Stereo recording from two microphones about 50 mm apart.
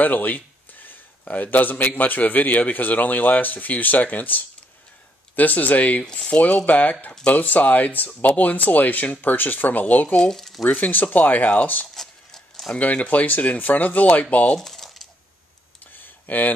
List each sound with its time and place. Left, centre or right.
0.0 s speech: left
0.8 s a sound: left
2.0 s speech: left
6.0 s speech: left
7.1 s speech: left
7.3 s speech: left
10.1 s speech: centre
10.6 s speech: left
11.9 s a sound: centre
12.7 s speech: left
14.5 s typing: centre
15.9 s a sound: left